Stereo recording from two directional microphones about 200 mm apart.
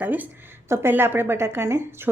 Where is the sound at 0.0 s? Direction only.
10° right (ahead or behind).